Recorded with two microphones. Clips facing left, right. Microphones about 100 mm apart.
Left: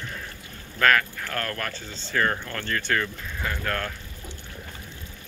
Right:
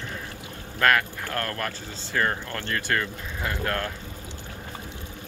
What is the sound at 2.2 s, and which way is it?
Speech, 25° right (ahead or behind).